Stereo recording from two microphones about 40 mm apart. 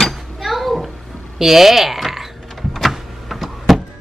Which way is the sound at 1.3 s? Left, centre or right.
Centre.